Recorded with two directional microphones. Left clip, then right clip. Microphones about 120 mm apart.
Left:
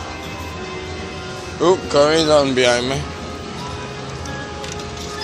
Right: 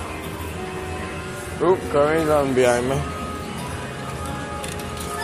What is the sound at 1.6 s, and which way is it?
Speech, 40° left (ahead or behind).